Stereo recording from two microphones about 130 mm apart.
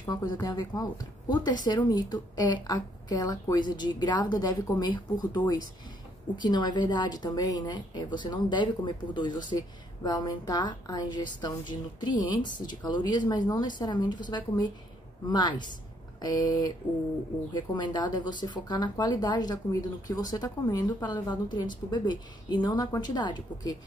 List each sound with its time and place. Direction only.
0.1 s a woman's voice: 30° left (ahead or behind)
15.2 s a woman's voice: 35° left (ahead or behind)